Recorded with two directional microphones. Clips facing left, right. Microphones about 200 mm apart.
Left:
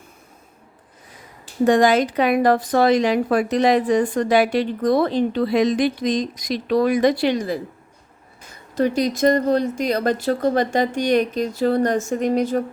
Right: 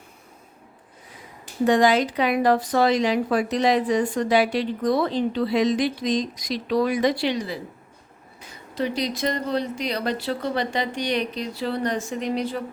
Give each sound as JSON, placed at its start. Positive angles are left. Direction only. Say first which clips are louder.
{"t": 1.6, "sound": "a woman's voice", "louder": "left 3 dB", "side_deg": 50}